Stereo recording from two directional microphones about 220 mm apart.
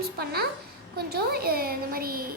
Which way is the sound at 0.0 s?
45° right (ahead or behind).